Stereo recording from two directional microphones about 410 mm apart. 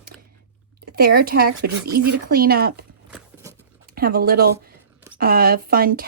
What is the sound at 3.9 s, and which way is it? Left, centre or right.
Speech, right.